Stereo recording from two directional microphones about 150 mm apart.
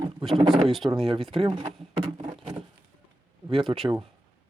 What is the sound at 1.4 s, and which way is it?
Speech, 35° right (ahead or behind).